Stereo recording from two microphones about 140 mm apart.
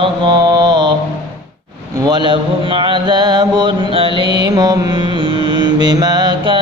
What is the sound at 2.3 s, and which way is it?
Mantra, 35° right (ahead or behind).